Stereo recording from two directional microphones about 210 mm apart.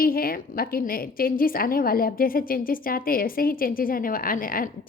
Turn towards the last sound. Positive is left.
turn(degrees=40)  # may be behind; listen again after turning